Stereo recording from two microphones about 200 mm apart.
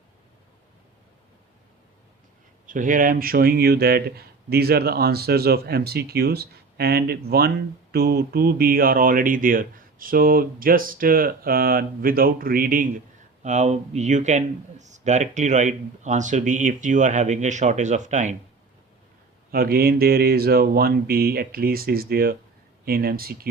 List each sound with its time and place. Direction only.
2.6 s speech: 40° right (ahead or behind)
19.5 s speech: 50° right (ahead or behind)